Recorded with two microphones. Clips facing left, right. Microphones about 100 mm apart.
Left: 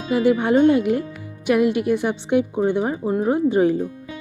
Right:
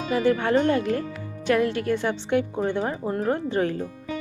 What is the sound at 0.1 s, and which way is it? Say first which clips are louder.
Speech: left 4 dB; 15° left (ahead or behind).